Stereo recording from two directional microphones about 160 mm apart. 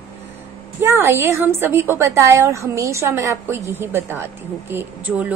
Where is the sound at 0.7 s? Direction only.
15° right (ahead or behind).